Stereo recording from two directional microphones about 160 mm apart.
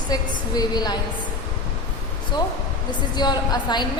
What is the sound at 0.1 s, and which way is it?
Speech, 25° left (ahead or behind).